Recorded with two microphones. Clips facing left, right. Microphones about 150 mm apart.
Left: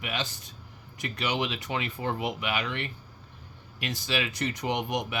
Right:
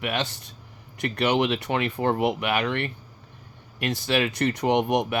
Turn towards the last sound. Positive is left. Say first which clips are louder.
# right 8 dB
turn(degrees=-60)  # may be behind; listen again after turning